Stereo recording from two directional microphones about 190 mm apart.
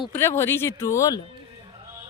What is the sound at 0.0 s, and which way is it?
Speech, 10° left (ahead or behind).